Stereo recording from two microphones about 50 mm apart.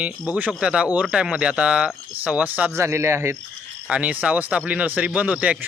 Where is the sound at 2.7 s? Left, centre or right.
Right.